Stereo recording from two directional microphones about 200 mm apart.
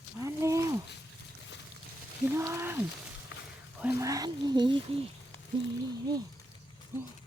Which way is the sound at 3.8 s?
15° right (ahead or behind).